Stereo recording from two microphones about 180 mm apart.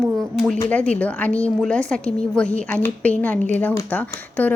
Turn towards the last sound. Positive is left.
turn(degrees=10)  # may be behind; listen again after turning